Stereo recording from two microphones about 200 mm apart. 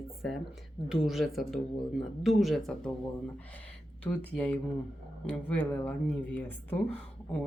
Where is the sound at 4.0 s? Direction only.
5° left (ahead or behind).